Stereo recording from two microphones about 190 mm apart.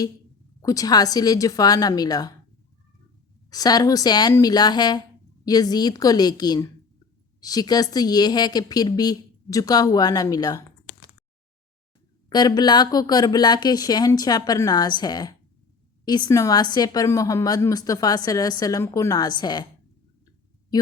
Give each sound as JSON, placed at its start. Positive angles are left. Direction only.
{"t": 0.6, "sound": "a woman's voice", "side_deg": 20}
{"t": 3.5, "sound": "a woman's voice", "side_deg": 20}
{"t": 12.3, "sound": "a woman's voice", "side_deg": 20}